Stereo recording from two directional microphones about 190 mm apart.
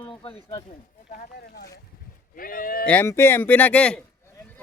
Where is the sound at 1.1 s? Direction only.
55° left (ahead or behind).